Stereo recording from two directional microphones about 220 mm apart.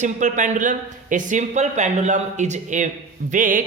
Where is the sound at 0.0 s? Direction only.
35° right (ahead or behind).